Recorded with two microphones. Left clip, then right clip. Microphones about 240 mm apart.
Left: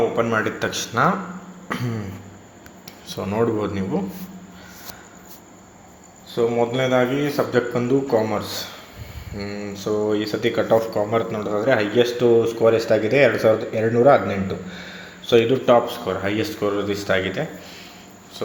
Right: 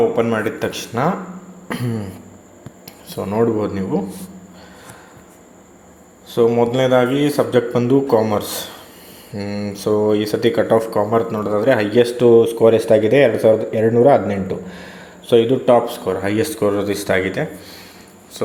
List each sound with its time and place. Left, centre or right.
0.2 s a man's voice: centre
1.6 s a sound: centre
3.1 s a man's voice: centre
6.3 s a man's voice: right